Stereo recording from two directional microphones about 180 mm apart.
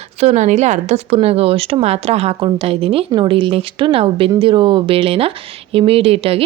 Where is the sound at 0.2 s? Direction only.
40° right (ahead or behind).